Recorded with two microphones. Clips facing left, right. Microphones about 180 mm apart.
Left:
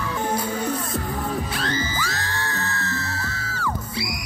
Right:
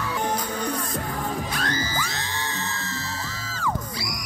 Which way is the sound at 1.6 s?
30° left (ahead or behind).